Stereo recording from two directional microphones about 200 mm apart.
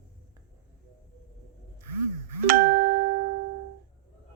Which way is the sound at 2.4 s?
45° right (ahead or behind).